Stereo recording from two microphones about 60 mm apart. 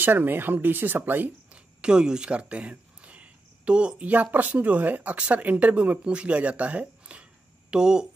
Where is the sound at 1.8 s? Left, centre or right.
Centre.